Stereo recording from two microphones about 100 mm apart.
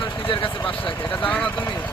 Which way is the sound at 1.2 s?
5° left (ahead or behind).